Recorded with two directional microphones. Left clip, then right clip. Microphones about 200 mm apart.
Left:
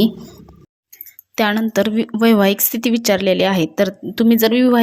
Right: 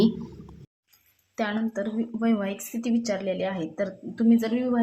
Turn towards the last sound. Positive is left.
turn(degrees=45)  # may be behind; listen again after turning